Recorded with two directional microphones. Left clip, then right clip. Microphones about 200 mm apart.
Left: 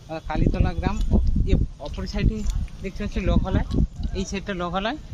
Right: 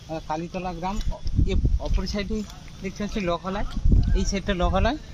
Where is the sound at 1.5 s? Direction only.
50° right (ahead or behind).